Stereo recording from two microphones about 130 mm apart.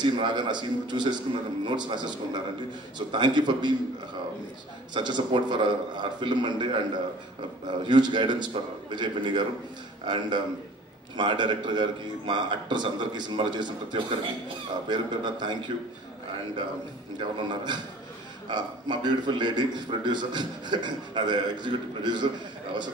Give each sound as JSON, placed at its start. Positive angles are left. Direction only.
{"t": 0.0, "sound": "a man's voice", "side_deg": -35}
{"t": 4.9, "sound": "a man's voice", "side_deg": -35}
{"t": 17.2, "sound": "a man's voice", "side_deg": -35}